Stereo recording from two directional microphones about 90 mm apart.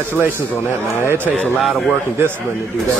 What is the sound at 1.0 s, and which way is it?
Speech, 25° right (ahead or behind).